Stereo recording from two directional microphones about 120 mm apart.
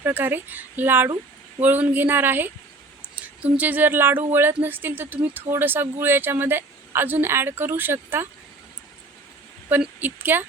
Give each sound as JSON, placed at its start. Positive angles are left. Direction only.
{"t": 0.0, "sound": "speech", "side_deg": -15}
{"t": 9.6, "sound": "speech", "side_deg": -15}